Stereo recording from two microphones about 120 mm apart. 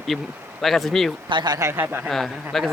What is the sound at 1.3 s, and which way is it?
Speech, 40° right (ahead or behind).